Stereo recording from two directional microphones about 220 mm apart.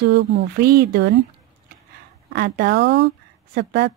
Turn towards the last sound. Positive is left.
turn(degrees=-50)  # may be behind; listen again after turning